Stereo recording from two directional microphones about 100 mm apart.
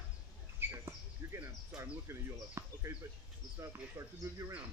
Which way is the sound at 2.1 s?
25° right (ahead or behind).